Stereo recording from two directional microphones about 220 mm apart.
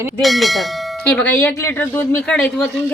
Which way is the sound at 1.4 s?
10° left (ahead or behind).